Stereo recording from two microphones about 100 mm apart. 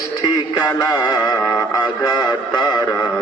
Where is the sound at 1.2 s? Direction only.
35° left (ahead or behind).